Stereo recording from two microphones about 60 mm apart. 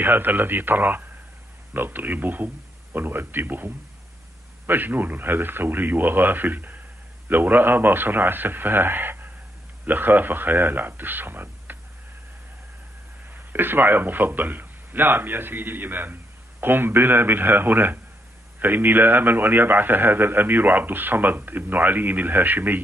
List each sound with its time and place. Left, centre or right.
0.0 s a man's voice: right
13.3 s a man's voice: right